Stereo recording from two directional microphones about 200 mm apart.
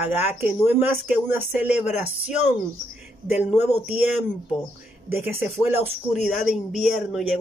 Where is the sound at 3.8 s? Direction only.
10° right (ahead or behind).